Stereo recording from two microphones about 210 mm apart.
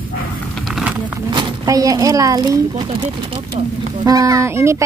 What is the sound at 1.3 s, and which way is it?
A woman's voice, 20° right (ahead or behind).